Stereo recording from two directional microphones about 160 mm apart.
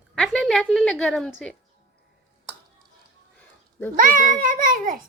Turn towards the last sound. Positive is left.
turn(degrees=-60)  # may be behind; listen again after turning